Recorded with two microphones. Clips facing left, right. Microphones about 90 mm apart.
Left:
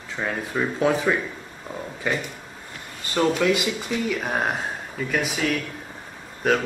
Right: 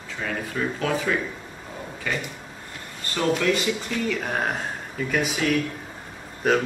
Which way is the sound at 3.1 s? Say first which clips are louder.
Left 2 dB; 10° left (ahead or behind).